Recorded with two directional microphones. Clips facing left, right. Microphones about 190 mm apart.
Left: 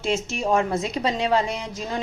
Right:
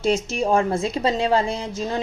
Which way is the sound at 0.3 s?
30° right (ahead or behind).